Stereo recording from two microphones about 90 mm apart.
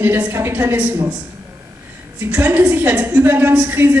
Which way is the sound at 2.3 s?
15° right (ahead or behind).